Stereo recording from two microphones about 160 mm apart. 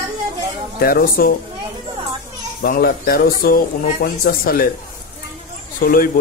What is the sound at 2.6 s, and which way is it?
Speech, 65° left (ahead or behind).